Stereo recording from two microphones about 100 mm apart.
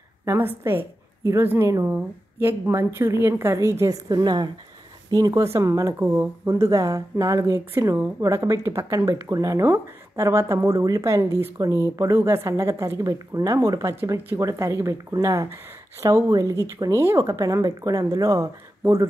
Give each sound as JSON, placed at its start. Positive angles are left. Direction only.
{"t": 0.2, "sound": "a woman's voice", "side_deg": -25}